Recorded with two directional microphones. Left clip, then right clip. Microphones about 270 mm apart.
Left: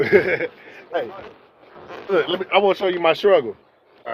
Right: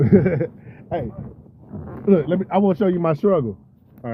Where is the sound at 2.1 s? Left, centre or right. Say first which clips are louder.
Left 2 dB; centre.